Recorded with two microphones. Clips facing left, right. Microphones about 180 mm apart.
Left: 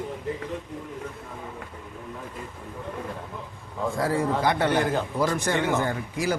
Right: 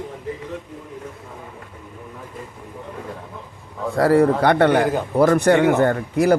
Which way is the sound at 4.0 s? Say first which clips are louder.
Right 10 dB; 65° right (ahead or behind).